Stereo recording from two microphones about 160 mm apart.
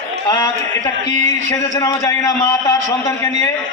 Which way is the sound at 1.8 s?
20° left (ahead or behind).